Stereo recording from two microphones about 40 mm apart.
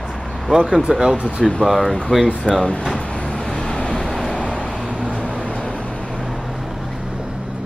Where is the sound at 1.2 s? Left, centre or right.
Centre.